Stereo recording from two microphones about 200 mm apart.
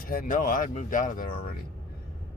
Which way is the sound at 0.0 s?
45° left (ahead or behind).